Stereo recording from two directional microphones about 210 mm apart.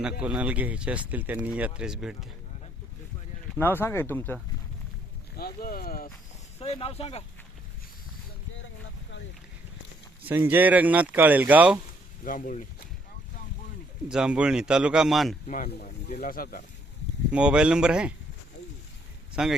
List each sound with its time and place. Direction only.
0.0 s speech: 5° right (ahead or behind)
3.5 s speech: 10° left (ahead or behind)
5.4 s speech: 45° left (ahead or behind)
6.6 s speech: 25° left (ahead or behind)
10.2 s speech: 10° right (ahead or behind)
12.2 s speech: 40° left (ahead or behind)
14.1 s a man's voice: 5° right (ahead or behind)
15.4 s speech: 35° left (ahead or behind)
17.3 s a man's voice: 5° right (ahead or behind)
19.4 s a man's voice: 5° right (ahead or behind)